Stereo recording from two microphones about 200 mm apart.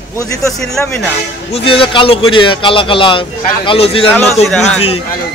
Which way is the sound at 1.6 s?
25° left (ahead or behind).